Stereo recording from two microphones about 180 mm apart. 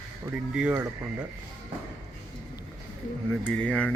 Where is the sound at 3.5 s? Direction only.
5° left (ahead or behind).